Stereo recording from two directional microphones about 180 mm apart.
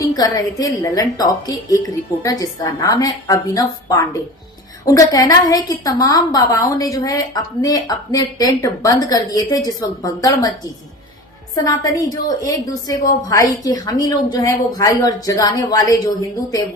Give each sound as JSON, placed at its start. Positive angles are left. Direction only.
{"t": 0.0, "sound": "a woman's voice", "side_deg": 20}
{"t": 11.5, "sound": "a woman's voice", "side_deg": 20}